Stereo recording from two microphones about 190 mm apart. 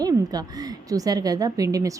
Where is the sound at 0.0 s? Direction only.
20° right (ahead or behind).